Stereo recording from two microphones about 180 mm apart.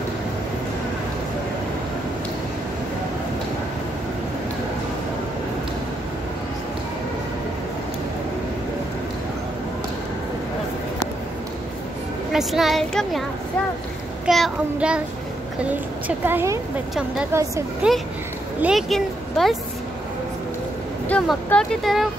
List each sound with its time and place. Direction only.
12.3 s speech: centre (ahead or behind)
14.2 s speech: centre (ahead or behind)
16.3 s a woman's voice: 10° right (ahead or behind)
18.6 s speech: centre (ahead or behind)
21.1 s speech: 5° left (ahead or behind)